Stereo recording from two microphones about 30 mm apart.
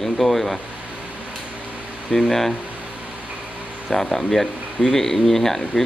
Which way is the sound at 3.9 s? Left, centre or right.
Centre.